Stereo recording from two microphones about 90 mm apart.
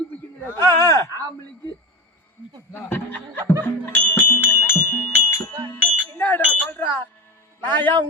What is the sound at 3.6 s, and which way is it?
Music, 20° left (ahead or behind).